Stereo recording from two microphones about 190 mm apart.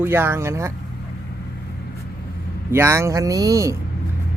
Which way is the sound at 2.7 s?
15° right (ahead or behind).